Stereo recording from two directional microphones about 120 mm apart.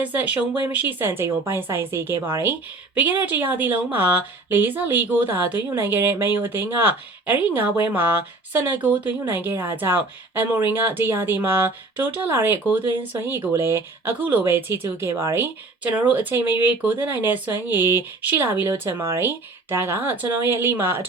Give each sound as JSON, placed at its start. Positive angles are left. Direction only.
{"t": 0.0, "sound": "speech", "side_deg": -15}